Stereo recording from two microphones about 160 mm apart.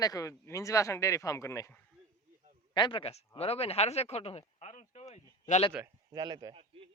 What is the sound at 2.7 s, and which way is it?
Speech, 30° left (ahead or behind).